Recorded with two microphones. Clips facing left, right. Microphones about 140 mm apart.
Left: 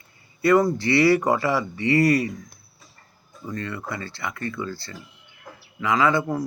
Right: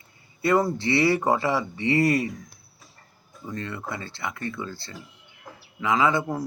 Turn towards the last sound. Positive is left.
turn(degrees=-20)  # may be behind; listen again after turning